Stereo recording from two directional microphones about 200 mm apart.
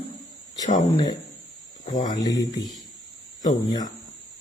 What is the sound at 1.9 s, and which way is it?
Speech, 35° left (ahead or behind).